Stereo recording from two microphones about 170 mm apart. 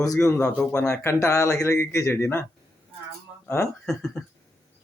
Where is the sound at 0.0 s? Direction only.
20° left (ahead or behind).